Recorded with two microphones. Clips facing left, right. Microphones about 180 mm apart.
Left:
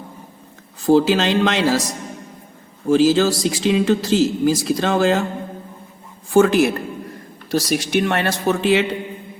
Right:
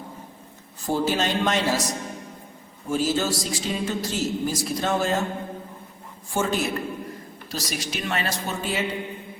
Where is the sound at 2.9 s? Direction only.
90° left.